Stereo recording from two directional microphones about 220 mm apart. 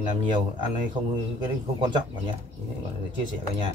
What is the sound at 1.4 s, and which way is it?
Speech, 20° right (ahead or behind).